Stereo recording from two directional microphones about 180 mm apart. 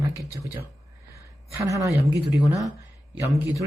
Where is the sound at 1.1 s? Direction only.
15° right (ahead or behind).